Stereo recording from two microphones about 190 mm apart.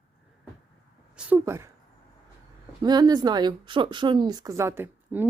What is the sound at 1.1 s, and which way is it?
Speech, 10° right (ahead or behind).